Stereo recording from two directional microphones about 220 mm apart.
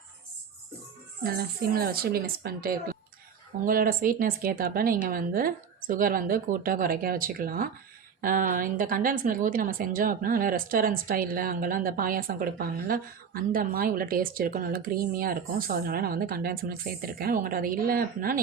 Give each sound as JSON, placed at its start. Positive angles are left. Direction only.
{"t": 1.2, "sound": "a woman's voice", "side_deg": -45}